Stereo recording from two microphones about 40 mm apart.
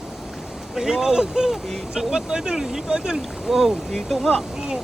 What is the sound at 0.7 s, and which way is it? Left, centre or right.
Speech, centre.